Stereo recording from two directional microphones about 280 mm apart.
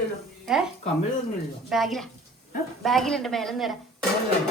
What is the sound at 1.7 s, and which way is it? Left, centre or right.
Speech, centre.